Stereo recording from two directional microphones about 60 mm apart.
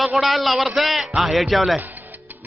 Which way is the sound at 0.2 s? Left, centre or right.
Centre.